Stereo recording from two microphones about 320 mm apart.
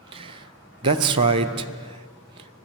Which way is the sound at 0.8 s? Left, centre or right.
Centre.